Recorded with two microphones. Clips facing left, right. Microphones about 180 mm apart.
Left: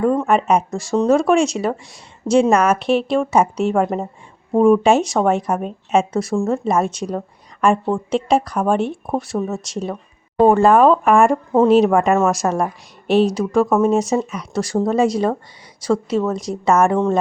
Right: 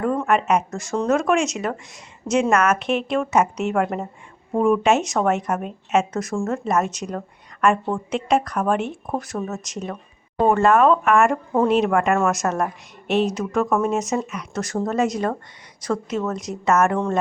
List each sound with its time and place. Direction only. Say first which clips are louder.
0.3 s speech: left 3 dB; 35° left (ahead or behind)